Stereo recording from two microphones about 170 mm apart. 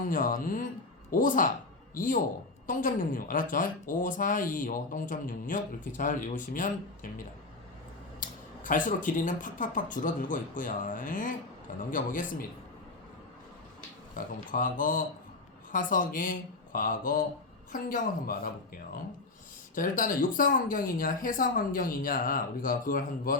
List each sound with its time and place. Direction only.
0.1 s a woman's voice: 55° left (ahead or behind)
8.2 s a woman's voice: 50° left (ahead or behind)
14.4 s a woman's voice: 55° left (ahead or behind)